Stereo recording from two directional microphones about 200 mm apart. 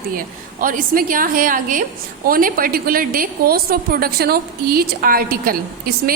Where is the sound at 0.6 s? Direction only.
45° right (ahead or behind).